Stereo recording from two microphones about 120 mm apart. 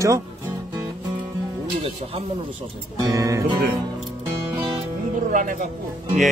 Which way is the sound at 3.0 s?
25° right (ahead or behind).